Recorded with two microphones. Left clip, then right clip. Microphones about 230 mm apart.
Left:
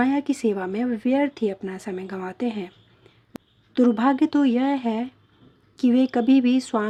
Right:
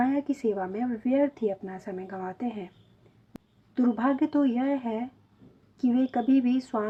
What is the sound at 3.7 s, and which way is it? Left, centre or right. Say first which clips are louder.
Speech: left 6 dB; left.